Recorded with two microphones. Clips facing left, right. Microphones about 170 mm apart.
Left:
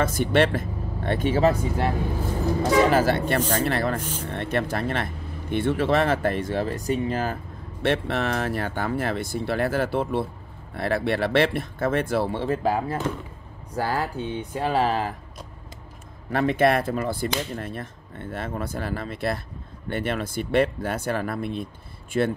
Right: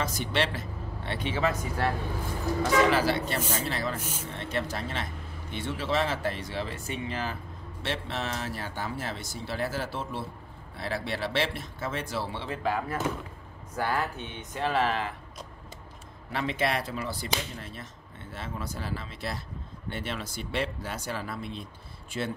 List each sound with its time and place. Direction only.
0.0 s speech: 50° left (ahead or behind); by 1.7 s 35° left (ahead or behind)
2.6 s speech: 45° left (ahead or behind)
7.8 s speech: 60° left (ahead or behind); by 15.1 s 40° left (ahead or behind)
16.3 s speech: 50° left (ahead or behind)